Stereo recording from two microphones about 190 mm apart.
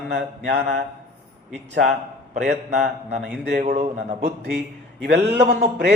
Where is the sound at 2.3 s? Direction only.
45° right (ahead or behind).